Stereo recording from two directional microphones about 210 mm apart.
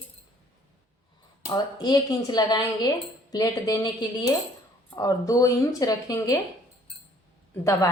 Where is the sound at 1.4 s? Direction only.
20° left (ahead or behind).